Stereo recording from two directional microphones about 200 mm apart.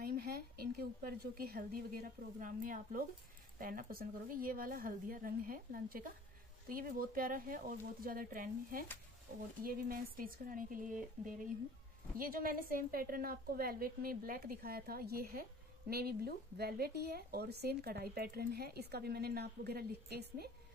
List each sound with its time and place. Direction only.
0.0 s a woman's voice: 50° right (ahead or behind)